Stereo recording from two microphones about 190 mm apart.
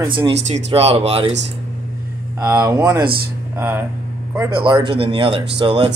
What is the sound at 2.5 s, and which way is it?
Speech, 20° right (ahead or behind).